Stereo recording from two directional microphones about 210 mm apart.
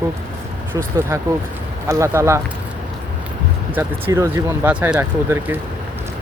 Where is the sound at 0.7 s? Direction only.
10° right (ahead or behind).